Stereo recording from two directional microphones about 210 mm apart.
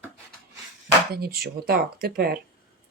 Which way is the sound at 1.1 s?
50° right (ahead or behind).